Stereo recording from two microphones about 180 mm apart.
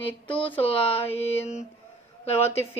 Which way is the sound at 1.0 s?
10° left (ahead or behind).